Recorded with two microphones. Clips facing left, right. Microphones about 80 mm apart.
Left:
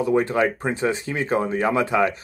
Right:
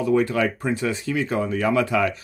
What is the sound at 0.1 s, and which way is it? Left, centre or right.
A man's voice, left.